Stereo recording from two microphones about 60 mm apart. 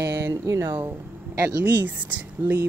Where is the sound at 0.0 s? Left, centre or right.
Right.